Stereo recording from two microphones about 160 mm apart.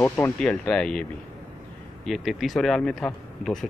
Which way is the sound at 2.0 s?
Centre (ahead or behind).